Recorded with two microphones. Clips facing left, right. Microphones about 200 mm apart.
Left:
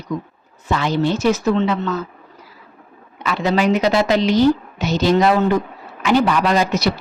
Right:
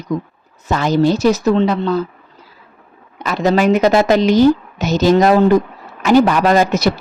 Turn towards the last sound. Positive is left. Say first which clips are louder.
# right 4 dB
turn(degrees=-50)  # may be behind; listen again after turning